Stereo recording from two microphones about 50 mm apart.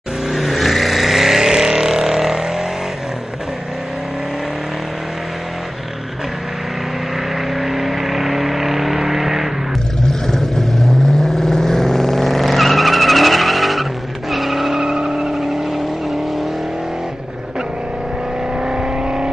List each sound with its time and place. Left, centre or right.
0.3 s vehicle: centre
7.5 s vehicle: centre
18.6 s vehicle: centre